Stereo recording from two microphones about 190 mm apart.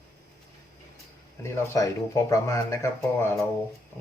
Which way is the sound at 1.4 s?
15° left (ahead or behind).